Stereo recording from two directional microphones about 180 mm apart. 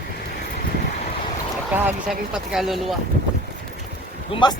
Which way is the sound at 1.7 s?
10° right (ahead or behind).